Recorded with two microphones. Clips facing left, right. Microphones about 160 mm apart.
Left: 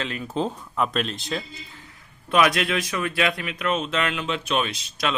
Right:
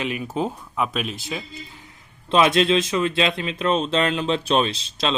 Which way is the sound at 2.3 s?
25° right (ahead or behind).